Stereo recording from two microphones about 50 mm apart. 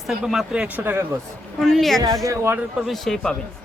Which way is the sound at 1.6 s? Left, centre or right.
Centre.